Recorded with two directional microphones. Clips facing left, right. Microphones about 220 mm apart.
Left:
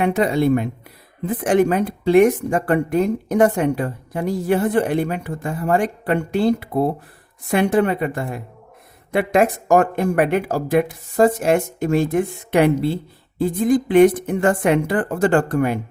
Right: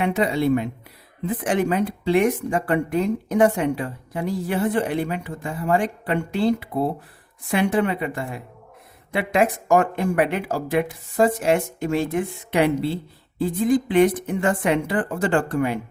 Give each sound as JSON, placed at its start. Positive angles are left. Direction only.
{"t": 0.0, "sound": "speech", "side_deg": 45}